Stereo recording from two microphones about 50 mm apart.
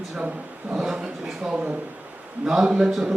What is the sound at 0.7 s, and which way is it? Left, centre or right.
A man's voice, centre.